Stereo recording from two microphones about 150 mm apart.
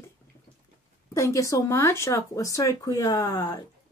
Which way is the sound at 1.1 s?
20° left (ahead or behind).